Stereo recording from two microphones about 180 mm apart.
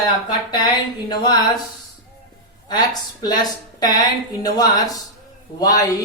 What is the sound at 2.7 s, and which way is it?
Speech, 20° left (ahead or behind).